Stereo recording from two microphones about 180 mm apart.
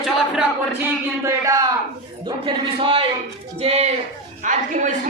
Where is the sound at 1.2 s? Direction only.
15° right (ahead or behind).